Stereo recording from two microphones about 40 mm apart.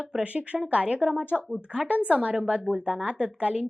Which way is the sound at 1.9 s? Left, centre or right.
Right.